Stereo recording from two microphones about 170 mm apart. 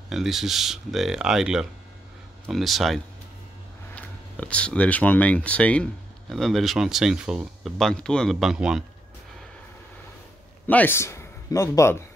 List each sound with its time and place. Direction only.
0.1 s speech: centre (ahead or behind)
10.7 s a man's voice: 10° left (ahead or behind)